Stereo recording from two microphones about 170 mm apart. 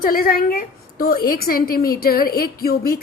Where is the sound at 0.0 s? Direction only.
60° left (ahead or behind).